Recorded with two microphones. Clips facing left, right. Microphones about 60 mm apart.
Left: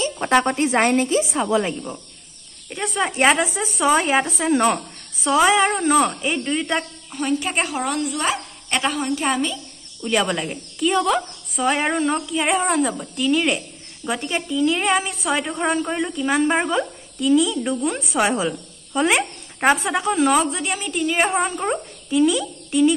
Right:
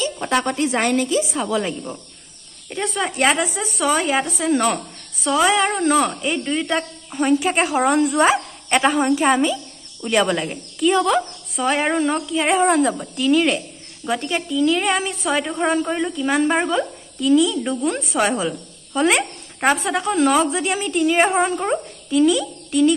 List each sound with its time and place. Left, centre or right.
0.0 s a woman's voice: left
1.4 s female singing: centre
2.7 s a woman's voice: centre
3.1 s female singing: centre
3.5 s speech: left
4.5 s female singing: centre
5.7 s a woman's voice: centre
7.1 s speech: right
7.3 s a woman's voice: centre
7.7 s speech: right
10.0 s a woman's voice: centre